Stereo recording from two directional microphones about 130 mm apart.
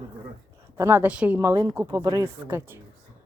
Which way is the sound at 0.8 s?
20° right (ahead or behind).